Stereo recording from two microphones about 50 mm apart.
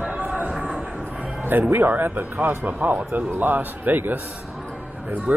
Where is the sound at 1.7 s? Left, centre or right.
Right.